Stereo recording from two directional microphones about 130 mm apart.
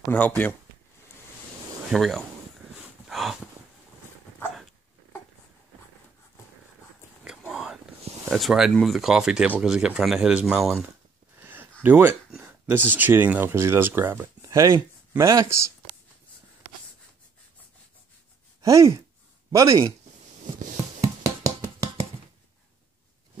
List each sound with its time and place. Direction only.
0.1 s speech: 10° left (ahead or behind)
1.9 s speech: centre (ahead or behind)
2.8 s a sound: centre (ahead or behind)
7.2 s whispering: 5° right (ahead or behind)
8.3 s speech: centre (ahead or behind)
11.4 s a sound: 15° right (ahead or behind)
11.8 s speech: 15° right (ahead or behind)
18.6 s speech: 25° right (ahead or behind)
21.0 s a sound: 25° right (ahead or behind)